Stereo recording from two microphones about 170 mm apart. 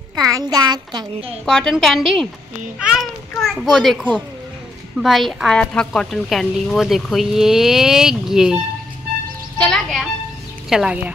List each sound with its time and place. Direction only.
0.3 s a child's voice: 20° right (ahead or behind)
1.4 s a woman's voice: 5° left (ahead or behind)